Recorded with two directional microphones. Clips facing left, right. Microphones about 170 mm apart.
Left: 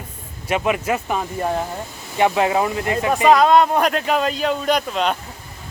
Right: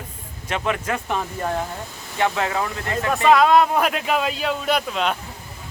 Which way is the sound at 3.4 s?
Centre (ahead or behind).